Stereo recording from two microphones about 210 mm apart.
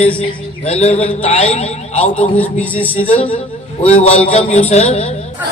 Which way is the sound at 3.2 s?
25° left (ahead or behind).